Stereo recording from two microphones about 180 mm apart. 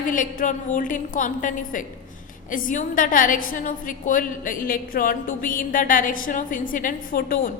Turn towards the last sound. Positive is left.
turn(degrees=55)  # may be behind; listen again after turning